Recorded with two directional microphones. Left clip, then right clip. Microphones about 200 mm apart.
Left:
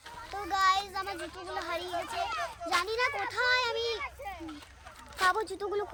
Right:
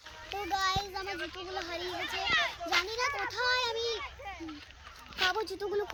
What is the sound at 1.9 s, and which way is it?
Speech, 45° left (ahead or behind).